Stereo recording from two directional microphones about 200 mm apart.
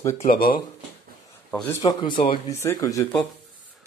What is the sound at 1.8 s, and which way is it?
Speech, 20° left (ahead or behind).